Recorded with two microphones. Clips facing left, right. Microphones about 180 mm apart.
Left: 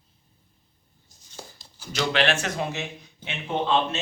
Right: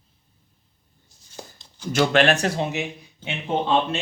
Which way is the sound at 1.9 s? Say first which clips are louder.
Right 5 dB; 50° right (ahead or behind).